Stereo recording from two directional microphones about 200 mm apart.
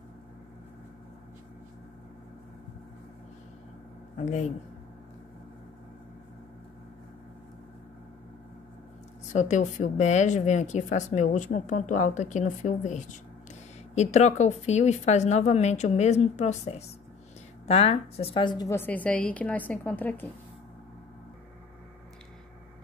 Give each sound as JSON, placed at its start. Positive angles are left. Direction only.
{"t": 4.2, "sound": "a woman's voice", "side_deg": 35}
{"t": 9.3, "sound": "a woman's voice", "side_deg": 35}